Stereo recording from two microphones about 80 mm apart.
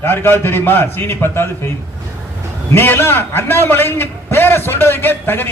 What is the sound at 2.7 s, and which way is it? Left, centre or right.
A man's voice, left.